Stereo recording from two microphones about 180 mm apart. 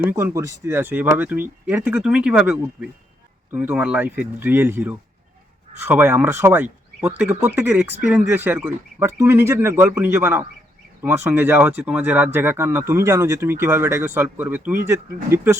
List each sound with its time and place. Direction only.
0.0 s speech: 10° right (ahead or behind)